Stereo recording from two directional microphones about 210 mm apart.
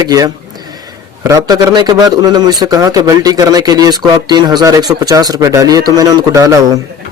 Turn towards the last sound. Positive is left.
turn(degrees=-15)  # may be behind; listen again after turning